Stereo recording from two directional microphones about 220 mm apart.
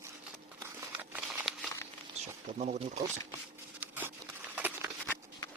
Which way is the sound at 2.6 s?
30° right (ahead or behind).